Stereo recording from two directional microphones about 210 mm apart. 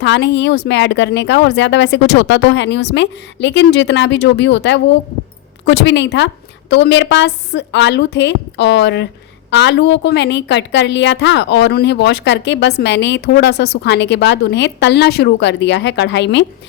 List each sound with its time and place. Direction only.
0.0 s a woman's voice: 55° left (ahead or behind)